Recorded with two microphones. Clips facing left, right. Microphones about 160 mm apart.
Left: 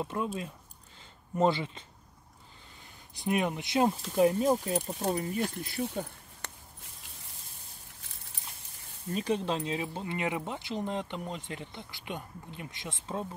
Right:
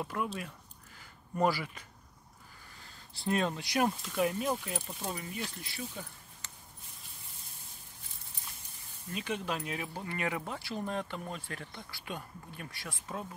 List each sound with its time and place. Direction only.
0.0 s speech: 25° left (ahead or behind); by 5.9 s 50° left (ahead or behind)
6.4 s walk: 60° left (ahead or behind)
9.1 s speech: 35° left (ahead or behind)